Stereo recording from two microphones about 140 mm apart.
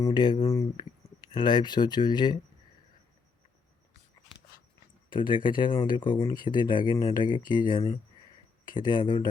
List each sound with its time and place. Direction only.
0.0 s speech: 30° left (ahead or behind)
5.0 s speech: 35° left (ahead or behind)